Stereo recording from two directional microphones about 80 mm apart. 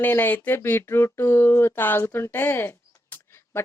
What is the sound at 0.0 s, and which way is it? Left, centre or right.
Speech, left.